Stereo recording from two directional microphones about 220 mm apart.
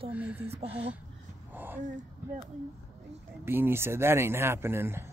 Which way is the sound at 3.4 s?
10° right (ahead or behind).